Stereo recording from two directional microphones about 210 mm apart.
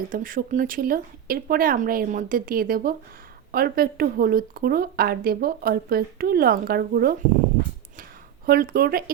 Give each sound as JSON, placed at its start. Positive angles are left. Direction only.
{"t": 0.1, "sound": "speech", "side_deg": -40}
{"t": 8.4, "sound": "speech", "side_deg": -45}